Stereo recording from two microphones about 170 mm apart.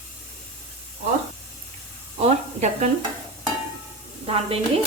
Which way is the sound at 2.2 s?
40° right (ahead or behind).